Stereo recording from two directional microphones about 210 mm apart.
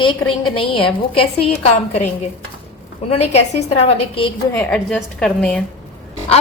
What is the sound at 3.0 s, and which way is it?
A woman's voice, 30° left (ahead or behind).